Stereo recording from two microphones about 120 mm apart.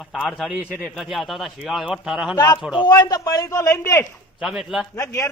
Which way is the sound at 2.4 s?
30° left (ahead or behind).